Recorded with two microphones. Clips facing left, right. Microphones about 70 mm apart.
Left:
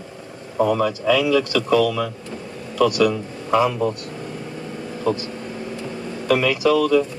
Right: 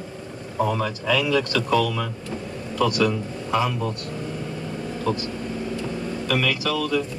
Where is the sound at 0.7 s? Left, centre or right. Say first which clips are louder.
Left 5 dB; left.